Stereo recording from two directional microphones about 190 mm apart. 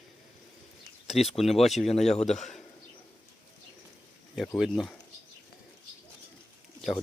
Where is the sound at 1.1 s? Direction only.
Centre (ahead or behind).